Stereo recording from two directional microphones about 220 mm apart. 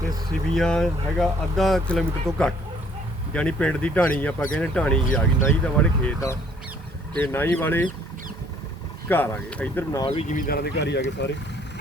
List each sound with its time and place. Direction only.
0.5 s speech: centre (ahead or behind)
9.0 s speech: 10° left (ahead or behind)
10.0 s speech: 25° left (ahead or behind); by 11.0 s 50° left (ahead or behind)